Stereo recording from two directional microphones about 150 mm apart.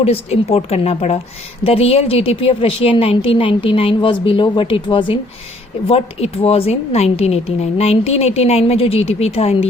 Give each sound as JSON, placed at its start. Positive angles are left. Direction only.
{"t": 0.0, "sound": "a woman's voice", "side_deg": 40}